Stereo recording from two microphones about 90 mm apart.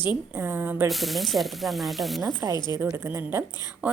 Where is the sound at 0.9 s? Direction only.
Centre (ahead or behind).